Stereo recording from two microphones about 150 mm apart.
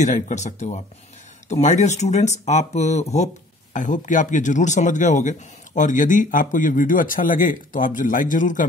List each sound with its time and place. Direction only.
0.0 s speech: 50° left (ahead or behind)